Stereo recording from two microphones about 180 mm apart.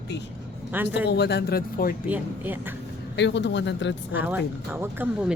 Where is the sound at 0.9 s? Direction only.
70° left (ahead or behind); by 2.0 s 55° left (ahead or behind).